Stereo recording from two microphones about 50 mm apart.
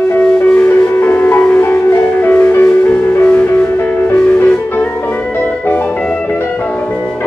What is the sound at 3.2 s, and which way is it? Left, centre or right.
Music, left.